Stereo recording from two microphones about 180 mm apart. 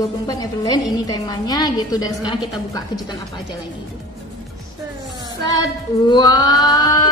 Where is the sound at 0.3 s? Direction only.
20° left (ahead or behind).